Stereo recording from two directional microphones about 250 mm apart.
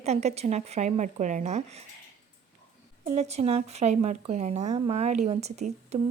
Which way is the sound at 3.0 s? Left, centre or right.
Right.